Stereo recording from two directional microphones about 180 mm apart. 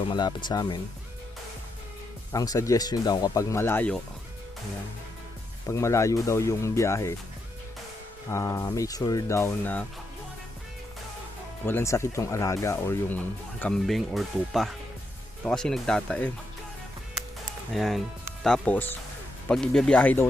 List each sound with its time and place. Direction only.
0.1 s speech: 25° left (ahead or behind)
2.3 s speech: 20° left (ahead or behind)
5.6 s speech: 15° left (ahead or behind)
8.3 s speech: 15° left (ahead or behind)
11.6 s speech: 15° left (ahead or behind)
17.7 s speech: centre (ahead or behind)